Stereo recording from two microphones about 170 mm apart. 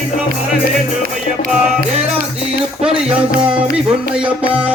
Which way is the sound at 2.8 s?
5° right (ahead or behind).